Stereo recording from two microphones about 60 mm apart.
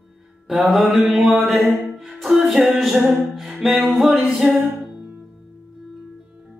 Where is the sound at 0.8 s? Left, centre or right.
Centre.